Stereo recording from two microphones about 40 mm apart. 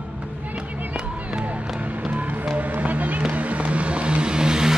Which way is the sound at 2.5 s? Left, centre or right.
Right.